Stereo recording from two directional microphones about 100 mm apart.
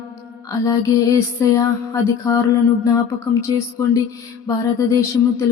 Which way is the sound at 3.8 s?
25° left (ahead or behind).